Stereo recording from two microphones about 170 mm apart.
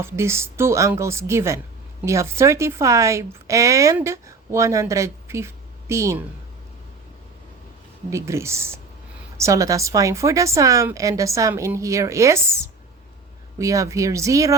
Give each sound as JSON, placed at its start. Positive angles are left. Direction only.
{"t": 0.0, "sound": "a woman's voice", "side_deg": -15}
{"t": 8.1, "sound": "a woman's voice", "side_deg": -15}